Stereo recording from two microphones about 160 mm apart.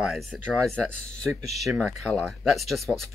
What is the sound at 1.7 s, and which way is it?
Speech, centre (ahead or behind).